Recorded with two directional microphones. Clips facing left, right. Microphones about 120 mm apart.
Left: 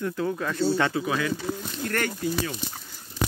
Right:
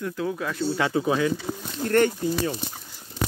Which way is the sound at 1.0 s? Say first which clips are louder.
Right 4 dB; 20° right (ahead or behind).